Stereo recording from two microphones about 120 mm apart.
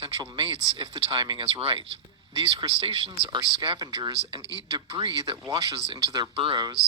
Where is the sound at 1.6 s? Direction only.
50° right (ahead or behind).